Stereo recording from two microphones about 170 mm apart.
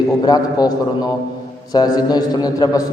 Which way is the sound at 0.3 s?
20° left (ahead or behind).